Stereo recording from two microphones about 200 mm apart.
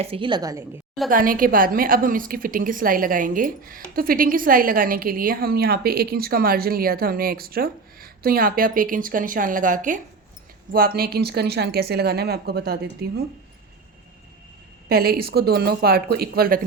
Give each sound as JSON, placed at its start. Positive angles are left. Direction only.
{"t": 0.0, "sound": "a woman's voice", "side_deg": -25}
{"t": 1.1, "sound": "a woman's voice", "side_deg": -45}
{"t": 14.8, "sound": "a woman's voice", "side_deg": -50}